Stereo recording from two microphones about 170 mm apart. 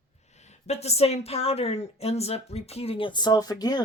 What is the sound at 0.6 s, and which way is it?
Speech, 40° left (ahead or behind).